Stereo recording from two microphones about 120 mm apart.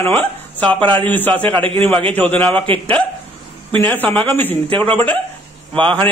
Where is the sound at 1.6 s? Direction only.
50° right (ahead or behind).